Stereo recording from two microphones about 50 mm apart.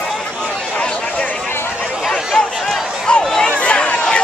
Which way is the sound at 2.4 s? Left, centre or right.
Centre.